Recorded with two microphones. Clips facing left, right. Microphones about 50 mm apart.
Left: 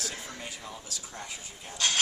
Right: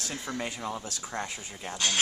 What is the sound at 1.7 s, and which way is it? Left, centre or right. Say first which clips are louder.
Speech: even; centre.